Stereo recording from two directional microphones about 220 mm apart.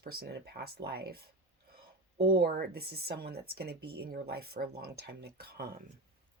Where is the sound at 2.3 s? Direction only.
45° right (ahead or behind).